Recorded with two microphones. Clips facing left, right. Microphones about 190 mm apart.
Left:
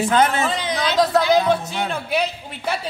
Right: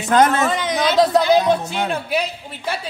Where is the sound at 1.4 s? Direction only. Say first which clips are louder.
Right 2 dB; 15° right (ahead or behind).